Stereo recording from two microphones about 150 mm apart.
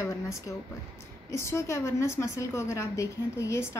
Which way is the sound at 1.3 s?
20° left (ahead or behind).